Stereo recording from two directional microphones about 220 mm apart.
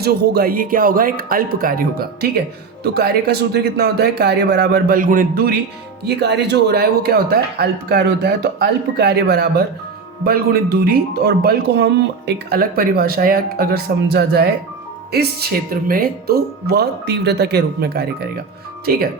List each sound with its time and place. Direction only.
0.0 s speech: 45° right (ahead or behind)